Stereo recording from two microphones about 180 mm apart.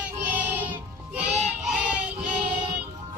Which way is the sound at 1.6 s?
5° right (ahead or behind).